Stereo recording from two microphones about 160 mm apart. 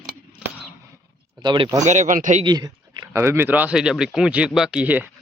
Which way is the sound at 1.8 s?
45° right (ahead or behind).